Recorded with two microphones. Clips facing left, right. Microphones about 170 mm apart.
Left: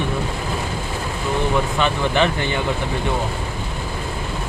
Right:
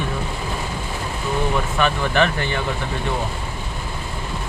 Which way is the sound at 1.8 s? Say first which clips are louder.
Right 2 dB; 20° left (ahead or behind).